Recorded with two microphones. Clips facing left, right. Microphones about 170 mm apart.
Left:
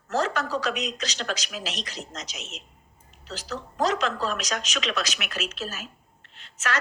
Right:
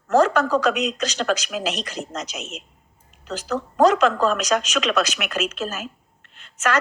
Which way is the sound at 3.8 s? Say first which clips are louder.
Right 9 dB; 50° right (ahead or behind).